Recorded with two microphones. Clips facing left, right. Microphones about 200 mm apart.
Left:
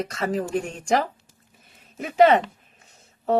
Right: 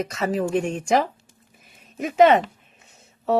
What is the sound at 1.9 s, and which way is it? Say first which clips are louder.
Speech: right 1 dB; 30° left (ahead or behind).